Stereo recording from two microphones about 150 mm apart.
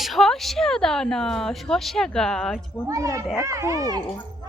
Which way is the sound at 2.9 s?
20° right (ahead or behind).